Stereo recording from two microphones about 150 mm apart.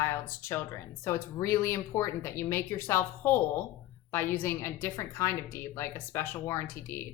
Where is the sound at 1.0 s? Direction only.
20° left (ahead or behind).